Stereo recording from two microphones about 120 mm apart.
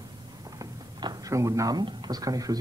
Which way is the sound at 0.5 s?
35° right (ahead or behind).